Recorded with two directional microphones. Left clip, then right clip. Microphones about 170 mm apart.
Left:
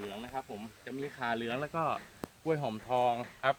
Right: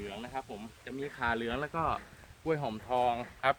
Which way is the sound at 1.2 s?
40° left (ahead or behind).